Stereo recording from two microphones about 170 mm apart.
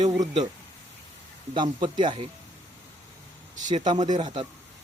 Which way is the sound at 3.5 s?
45° right (ahead or behind).